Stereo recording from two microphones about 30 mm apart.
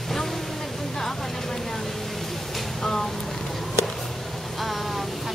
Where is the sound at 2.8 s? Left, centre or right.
Centre.